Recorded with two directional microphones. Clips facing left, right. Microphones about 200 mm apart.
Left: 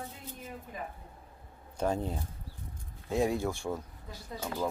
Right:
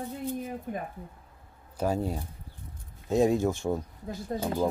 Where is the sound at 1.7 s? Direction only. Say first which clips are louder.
Right 3 dB; 10° right (ahead or behind).